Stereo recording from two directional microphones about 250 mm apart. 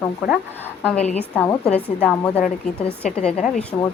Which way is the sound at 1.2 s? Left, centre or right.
Centre.